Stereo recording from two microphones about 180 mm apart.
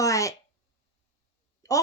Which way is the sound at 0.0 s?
15° left (ahead or behind).